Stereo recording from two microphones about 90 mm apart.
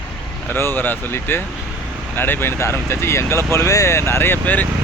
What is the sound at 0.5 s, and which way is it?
Speech, 25° left (ahead or behind).